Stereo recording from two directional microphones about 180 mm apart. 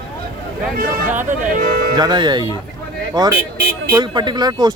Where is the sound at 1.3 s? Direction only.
45° right (ahead or behind).